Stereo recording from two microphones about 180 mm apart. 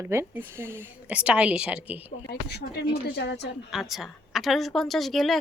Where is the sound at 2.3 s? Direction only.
65° left (ahead or behind).